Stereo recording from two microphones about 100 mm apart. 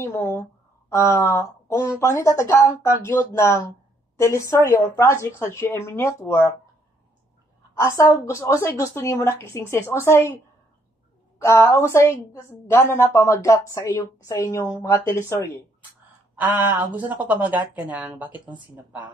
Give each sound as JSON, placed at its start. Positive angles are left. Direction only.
{"t": 0.0, "sound": "a woman's voice", "side_deg": 25}
{"t": 7.7, "sound": "a woman's voice", "side_deg": 25}
{"t": 11.3, "sound": "a woman's voice", "side_deg": 25}
{"t": 16.3, "sound": "a woman's voice", "side_deg": -20}